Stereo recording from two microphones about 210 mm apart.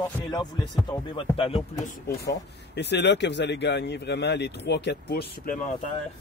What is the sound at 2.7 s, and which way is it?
Speech, 55° left (ahead or behind).